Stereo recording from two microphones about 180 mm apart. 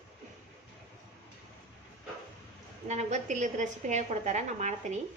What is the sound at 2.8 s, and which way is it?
A woman's voice, 40° right (ahead or behind).